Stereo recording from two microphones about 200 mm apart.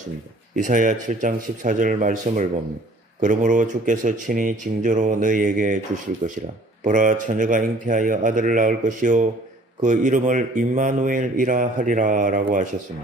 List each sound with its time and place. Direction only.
0.6 s speech: 40° right (ahead or behind)